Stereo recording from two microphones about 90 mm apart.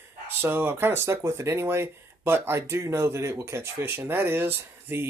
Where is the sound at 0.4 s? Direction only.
25° right (ahead or behind).